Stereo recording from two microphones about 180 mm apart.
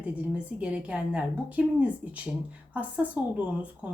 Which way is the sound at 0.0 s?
5° right (ahead or behind).